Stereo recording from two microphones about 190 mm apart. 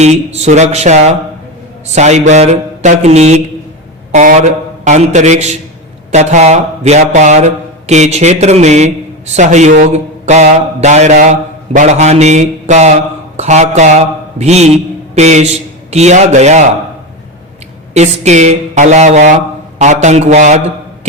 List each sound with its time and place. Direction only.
0.0 s a man's voice: 35° right (ahead or behind)
17.9 s speech: 35° right (ahead or behind)